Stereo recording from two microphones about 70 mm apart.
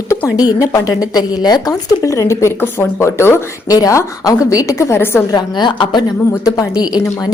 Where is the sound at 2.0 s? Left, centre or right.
Left.